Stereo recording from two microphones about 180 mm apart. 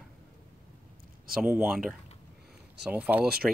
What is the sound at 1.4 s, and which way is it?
Speech, 5° right (ahead or behind).